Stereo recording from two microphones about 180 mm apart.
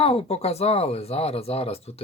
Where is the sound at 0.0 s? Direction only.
35° left (ahead or behind).